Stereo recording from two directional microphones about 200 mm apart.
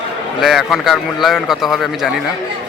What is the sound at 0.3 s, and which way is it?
A man's voice, centre (ahead or behind).